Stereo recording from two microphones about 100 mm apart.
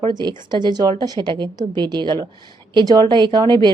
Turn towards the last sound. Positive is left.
turn(degrees=-50)  # may be behind; listen again after turning